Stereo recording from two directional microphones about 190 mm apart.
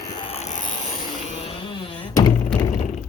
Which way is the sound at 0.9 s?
40° left (ahead or behind).